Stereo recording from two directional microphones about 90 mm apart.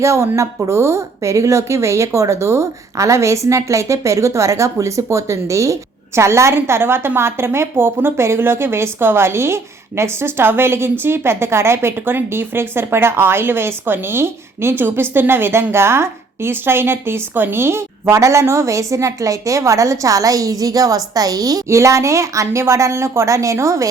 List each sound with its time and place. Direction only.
0.0 s a woman's voice: 35° right (ahead or behind)